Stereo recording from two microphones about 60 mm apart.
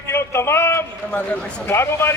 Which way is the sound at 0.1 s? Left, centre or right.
Left.